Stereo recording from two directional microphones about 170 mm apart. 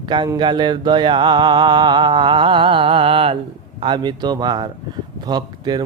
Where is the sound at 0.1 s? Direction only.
25° right (ahead or behind).